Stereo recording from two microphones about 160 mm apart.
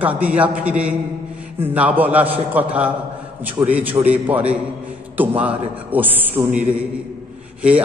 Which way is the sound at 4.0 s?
10° right (ahead or behind).